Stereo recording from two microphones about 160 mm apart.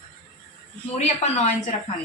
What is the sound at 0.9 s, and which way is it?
Speech, 45° left (ahead or behind).